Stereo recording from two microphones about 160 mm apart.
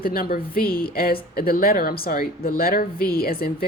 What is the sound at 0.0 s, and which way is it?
A woman's voice, 65° left (ahead or behind).